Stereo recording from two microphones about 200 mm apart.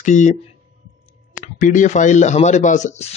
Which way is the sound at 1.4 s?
40° left (ahead or behind).